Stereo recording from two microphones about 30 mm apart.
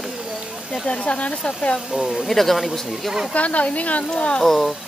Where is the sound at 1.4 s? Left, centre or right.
Left.